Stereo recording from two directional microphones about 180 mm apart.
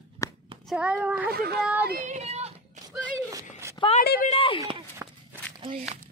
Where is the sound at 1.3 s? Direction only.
60° right (ahead or behind).